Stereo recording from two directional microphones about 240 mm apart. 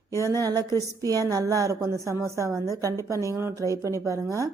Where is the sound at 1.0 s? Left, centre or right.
Centre.